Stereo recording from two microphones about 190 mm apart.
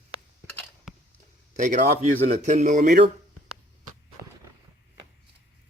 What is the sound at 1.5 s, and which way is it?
Speech, 40° right (ahead or behind).